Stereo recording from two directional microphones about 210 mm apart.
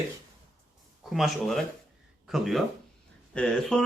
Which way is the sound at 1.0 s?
Centre (ahead or behind).